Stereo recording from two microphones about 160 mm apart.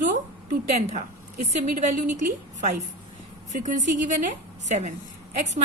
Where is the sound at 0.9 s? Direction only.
45° right (ahead or behind).